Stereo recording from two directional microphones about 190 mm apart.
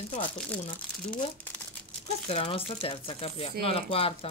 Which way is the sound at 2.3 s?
30° left (ahead or behind).